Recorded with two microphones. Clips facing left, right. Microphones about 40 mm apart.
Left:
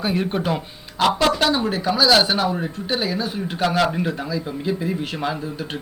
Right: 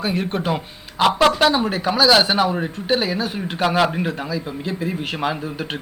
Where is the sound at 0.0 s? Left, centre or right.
Centre.